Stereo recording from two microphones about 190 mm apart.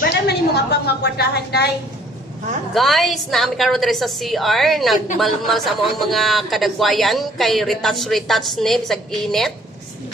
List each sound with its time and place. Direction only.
0.3 s a woman's voice: 60° left (ahead or behind)
2.7 s a man's voice: centre (ahead or behind)